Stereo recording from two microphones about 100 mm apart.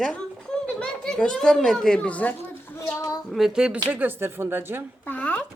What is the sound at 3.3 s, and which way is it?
Speech, centre (ahead or behind).